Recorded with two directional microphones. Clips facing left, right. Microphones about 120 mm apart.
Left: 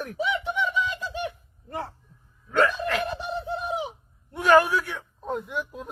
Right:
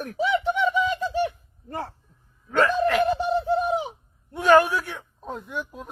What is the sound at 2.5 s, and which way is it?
Speech, 35° right (ahead or behind).